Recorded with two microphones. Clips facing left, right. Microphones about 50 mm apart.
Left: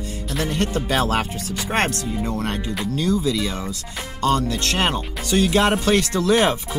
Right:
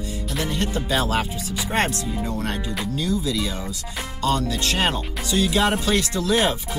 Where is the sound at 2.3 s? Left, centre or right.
Left.